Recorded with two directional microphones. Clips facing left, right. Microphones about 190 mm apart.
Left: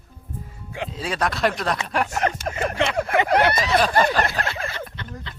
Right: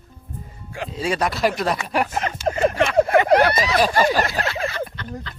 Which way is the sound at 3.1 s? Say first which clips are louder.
Right 1 dB; 20° left (ahead or behind).